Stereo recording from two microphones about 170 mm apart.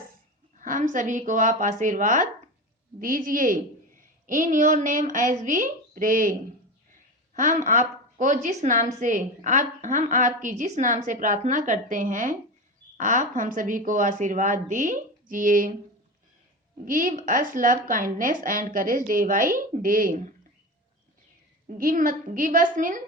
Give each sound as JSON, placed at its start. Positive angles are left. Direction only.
{"t": 0.6, "sound": "a woman's voice", "side_deg": -50}
{"t": 7.3, "sound": "a woman's voice", "side_deg": -50}
{"t": 16.8, "sound": "a woman's voice", "side_deg": -55}
{"t": 21.7, "sound": "a woman's voice", "side_deg": -55}